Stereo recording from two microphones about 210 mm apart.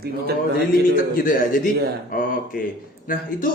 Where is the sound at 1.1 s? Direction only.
40° left (ahead or behind).